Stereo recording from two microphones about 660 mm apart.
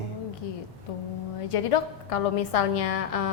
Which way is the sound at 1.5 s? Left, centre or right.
Left.